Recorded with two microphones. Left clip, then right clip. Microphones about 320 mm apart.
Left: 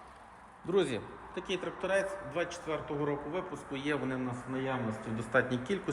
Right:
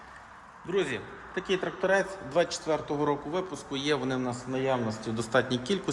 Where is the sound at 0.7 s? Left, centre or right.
Centre.